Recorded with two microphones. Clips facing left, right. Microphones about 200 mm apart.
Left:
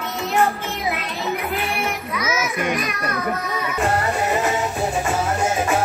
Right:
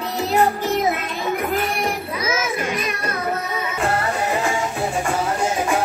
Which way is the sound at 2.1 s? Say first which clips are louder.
Left 2 dB; 30° right (ahead or behind).